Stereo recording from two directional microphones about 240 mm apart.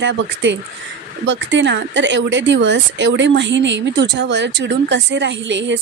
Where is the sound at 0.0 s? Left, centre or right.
Right.